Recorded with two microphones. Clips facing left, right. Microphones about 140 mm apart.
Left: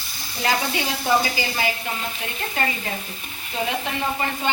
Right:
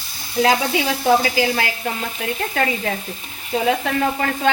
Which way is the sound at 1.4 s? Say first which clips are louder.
Right 6 dB; 90° right.